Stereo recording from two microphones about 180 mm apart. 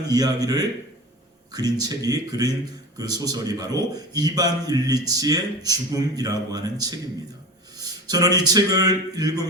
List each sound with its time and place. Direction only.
0.1 s a man's voice: 20° right (ahead or behind)